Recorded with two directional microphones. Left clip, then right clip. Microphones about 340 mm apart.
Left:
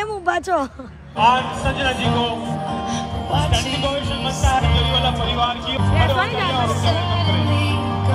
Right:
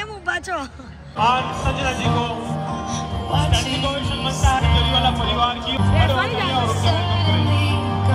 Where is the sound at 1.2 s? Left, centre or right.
Left.